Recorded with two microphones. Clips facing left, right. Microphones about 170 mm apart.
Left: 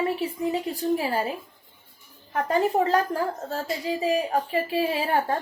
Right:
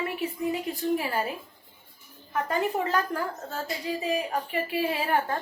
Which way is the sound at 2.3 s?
35° left (ahead or behind).